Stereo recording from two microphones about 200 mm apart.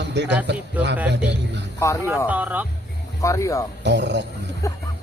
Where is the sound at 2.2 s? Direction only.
10° right (ahead or behind).